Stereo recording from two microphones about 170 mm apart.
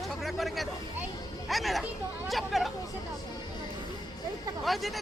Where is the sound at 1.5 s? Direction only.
Centre (ahead or behind).